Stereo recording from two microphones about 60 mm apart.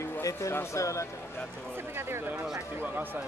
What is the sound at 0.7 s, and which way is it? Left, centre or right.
Speech, left.